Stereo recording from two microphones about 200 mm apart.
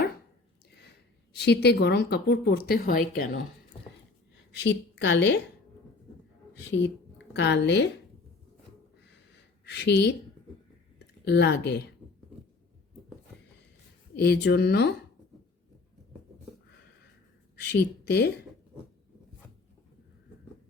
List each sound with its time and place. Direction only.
0.7 s a woman's voice: 55° left (ahead or behind)
3.7 s a sound: 25° left (ahead or behind)
4.5 s a woman's voice: 60° left (ahead or behind)
6.7 s speech: 65° left (ahead or behind)
9.6 s speech: 55° left (ahead or behind)
14.2 s speech: 55° left (ahead or behind)
17.7 s speech: 55° left (ahead or behind)